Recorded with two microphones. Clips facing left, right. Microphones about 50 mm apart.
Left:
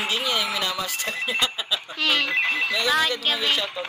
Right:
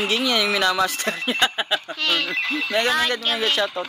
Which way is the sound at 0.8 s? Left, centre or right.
Right.